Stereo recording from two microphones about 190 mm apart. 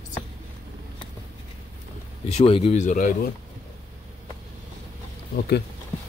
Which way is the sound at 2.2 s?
30° left (ahead or behind).